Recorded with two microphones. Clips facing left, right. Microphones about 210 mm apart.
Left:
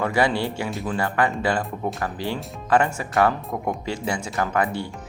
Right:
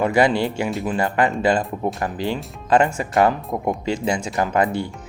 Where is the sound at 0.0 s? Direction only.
15° right (ahead or behind).